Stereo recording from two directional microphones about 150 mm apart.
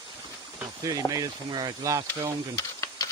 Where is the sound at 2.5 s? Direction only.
20° left (ahead or behind).